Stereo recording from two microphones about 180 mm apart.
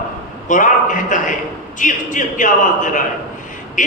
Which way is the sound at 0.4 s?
45° left (ahead or behind).